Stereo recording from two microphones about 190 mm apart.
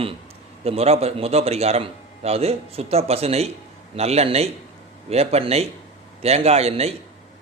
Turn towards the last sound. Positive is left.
turn(degrees=-35)  # may be behind; listen again after turning